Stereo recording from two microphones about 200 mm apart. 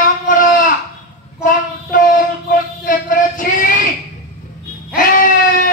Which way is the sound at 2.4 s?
45° left (ahead or behind).